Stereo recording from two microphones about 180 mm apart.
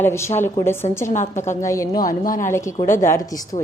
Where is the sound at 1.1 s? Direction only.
40° left (ahead or behind).